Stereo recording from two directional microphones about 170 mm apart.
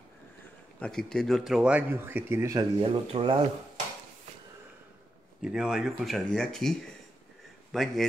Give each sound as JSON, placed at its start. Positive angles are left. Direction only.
{"t": 0.7, "sound": "speech", "side_deg": 5}
{"t": 2.8, "sound": "speech", "side_deg": -30}
{"t": 5.4, "sound": "speech", "side_deg": -5}
{"t": 7.7, "sound": "a man's voice", "side_deg": 0}